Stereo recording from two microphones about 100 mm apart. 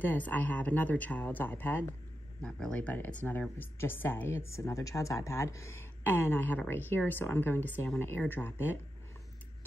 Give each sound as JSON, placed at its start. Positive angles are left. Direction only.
{"t": 0.0, "sound": "speech", "side_deg": 20}
{"t": 2.4, "sound": "speech", "side_deg": 10}